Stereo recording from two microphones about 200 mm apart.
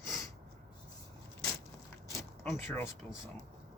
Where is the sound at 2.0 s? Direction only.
10° left (ahead or behind).